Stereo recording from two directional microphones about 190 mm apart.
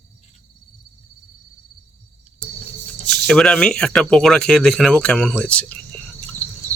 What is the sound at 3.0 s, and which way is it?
Speech, 5° left (ahead or behind).